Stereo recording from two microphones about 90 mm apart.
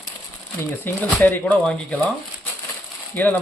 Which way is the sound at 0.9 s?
20° left (ahead or behind).